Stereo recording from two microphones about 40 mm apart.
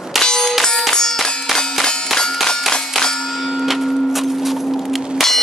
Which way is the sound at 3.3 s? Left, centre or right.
Centre.